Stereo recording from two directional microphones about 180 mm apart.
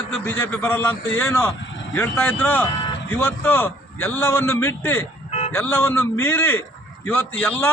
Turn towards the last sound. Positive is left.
turn(degrees=10)  # may be behind; listen again after turning